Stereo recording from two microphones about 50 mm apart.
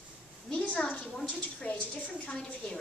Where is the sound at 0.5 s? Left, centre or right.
Left.